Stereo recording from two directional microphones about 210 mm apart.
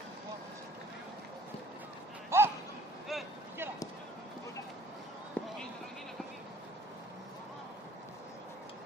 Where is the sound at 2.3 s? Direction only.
10° right (ahead or behind).